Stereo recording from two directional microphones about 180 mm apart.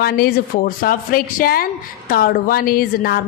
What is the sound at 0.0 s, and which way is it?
A woman's voice, 60° left (ahead or behind).